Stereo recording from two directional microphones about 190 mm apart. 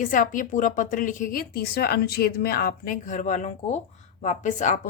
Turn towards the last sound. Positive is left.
turn(degrees=40)  # may be behind; listen again after turning